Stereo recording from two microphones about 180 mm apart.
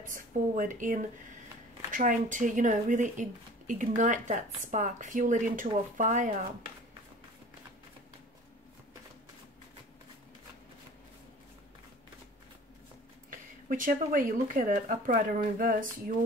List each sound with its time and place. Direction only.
0.0 s speech: 50° right (ahead or behind)
13.7 s speech: 50° right (ahead or behind)